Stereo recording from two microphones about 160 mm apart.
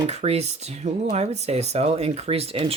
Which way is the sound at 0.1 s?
40° right (ahead or behind).